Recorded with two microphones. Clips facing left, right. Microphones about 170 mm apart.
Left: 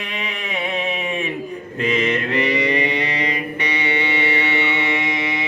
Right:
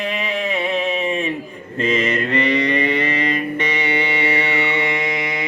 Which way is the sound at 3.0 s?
50° right (ahead or behind).